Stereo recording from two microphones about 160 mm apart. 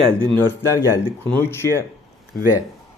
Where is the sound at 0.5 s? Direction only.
15° left (ahead or behind).